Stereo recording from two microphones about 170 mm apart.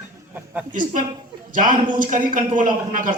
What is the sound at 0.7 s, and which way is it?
A man's voice, 50° right (ahead or behind).